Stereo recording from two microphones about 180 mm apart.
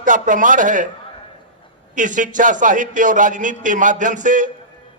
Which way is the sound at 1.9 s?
45° right (ahead or behind).